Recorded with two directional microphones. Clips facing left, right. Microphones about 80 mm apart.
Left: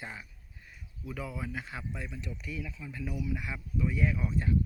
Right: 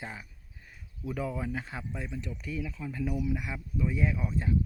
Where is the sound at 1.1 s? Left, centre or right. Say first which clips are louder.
Right 5 dB; right; by 4.5 s centre.